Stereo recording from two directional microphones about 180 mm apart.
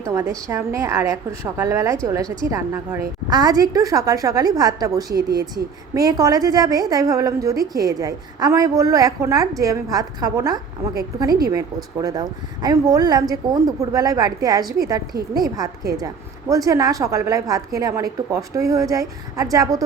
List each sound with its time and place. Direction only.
0.0 s a woman's voice: 15° right (ahead or behind)